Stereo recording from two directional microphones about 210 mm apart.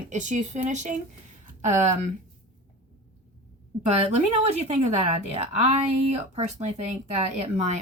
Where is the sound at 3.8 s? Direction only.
30° right (ahead or behind).